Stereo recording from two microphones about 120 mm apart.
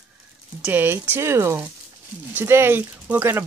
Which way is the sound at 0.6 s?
15° right (ahead or behind).